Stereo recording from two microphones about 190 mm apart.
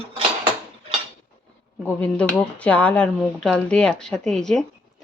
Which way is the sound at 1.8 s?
5° left (ahead or behind).